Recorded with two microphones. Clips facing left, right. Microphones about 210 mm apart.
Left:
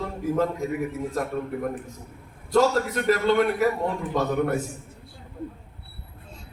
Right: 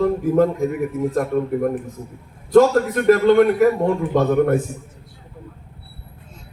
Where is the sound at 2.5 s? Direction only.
50° right (ahead or behind).